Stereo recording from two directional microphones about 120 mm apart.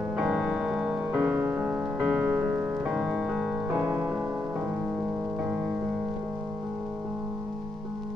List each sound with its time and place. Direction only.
0.2 s music: 5° right (ahead or behind)
1.2 s music: 20° right (ahead or behind)
3.8 s music: 15° right (ahead or behind)